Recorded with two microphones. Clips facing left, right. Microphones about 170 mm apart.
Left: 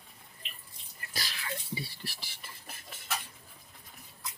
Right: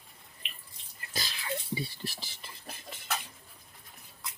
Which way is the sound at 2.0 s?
25° right (ahead or behind).